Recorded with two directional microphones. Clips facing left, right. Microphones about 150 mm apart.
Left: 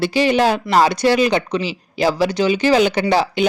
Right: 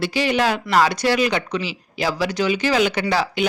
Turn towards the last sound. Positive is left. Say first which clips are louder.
# left 4 dB
turn(degrees=30)  # may be behind; listen again after turning